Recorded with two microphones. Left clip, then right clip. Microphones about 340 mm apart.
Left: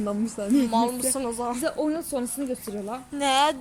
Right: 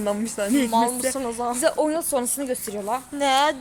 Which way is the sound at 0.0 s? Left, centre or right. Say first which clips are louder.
Right 4 dB; right.